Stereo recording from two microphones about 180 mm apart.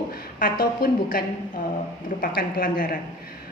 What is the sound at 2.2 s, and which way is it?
Speech, 50° left (ahead or behind).